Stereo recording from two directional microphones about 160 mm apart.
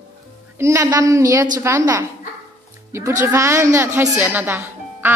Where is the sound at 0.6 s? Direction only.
20° right (ahead or behind).